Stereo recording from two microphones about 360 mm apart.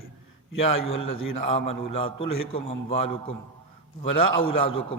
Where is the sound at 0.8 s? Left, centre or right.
Centre.